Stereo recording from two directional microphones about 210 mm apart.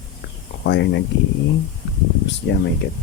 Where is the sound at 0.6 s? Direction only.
60° left (ahead or behind).